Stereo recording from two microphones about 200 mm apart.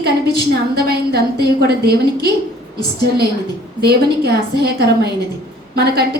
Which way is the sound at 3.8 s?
55° right (ahead or behind).